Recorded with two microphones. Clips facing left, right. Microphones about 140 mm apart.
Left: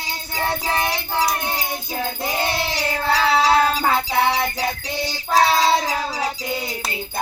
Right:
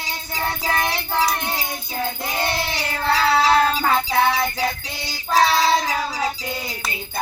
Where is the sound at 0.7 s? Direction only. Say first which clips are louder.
Even; 20° left (ahead or behind).